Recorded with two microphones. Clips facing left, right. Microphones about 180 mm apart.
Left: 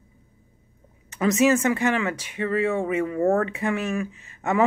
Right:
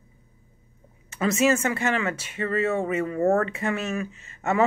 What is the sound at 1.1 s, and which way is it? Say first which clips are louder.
Speech: left 2 dB; 15° left (ahead or behind).